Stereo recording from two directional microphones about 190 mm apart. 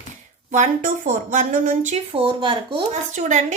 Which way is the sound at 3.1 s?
40° right (ahead or behind).